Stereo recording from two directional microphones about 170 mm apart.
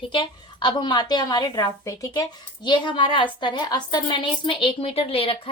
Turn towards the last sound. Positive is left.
turn(degrees=35)  # may be behind; listen again after turning